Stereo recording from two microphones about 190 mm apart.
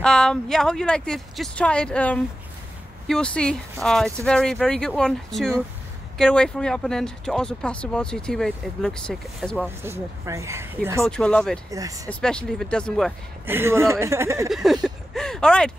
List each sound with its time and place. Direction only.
0.0 s speech: 5° left (ahead or behind)
9.8 s speech: 15° right (ahead or behind)
11.1 s speech: 5° left (ahead or behind)
11.7 s speech: 20° right (ahead or behind)
12.1 s speech: 5° left (ahead or behind)
13.5 s speech: 15° right (ahead or behind)
14.5 s speech: centre (ahead or behind)